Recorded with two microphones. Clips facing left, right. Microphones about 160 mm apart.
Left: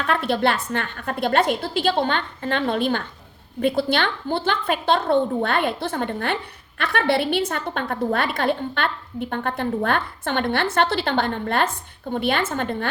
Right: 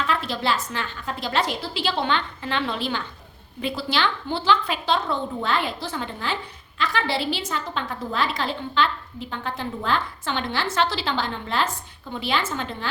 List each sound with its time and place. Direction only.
0.0 s a woman's voice: 55° left (ahead or behind)